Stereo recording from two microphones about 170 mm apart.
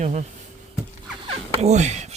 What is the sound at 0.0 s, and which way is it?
Speech, 45° right (ahead or behind).